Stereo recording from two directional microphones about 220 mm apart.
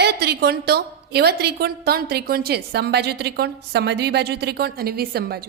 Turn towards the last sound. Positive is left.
turn(degrees=-45)  # may be behind; listen again after turning